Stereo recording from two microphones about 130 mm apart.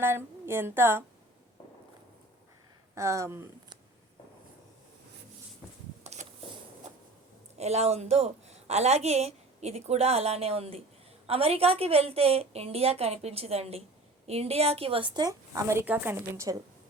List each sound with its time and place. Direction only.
0.0 s speech: 20° right (ahead or behind)
2.9 s speech: 25° right (ahead or behind)
6.0 s a sound: 65° right (ahead or behind)
7.6 s a woman's voice: 55° right (ahead or behind); by 16.6 s 20° right (ahead or behind)